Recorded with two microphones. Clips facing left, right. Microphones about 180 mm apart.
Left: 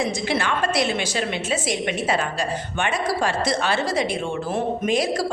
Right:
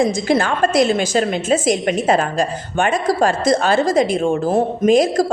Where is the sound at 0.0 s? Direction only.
45° right (ahead or behind).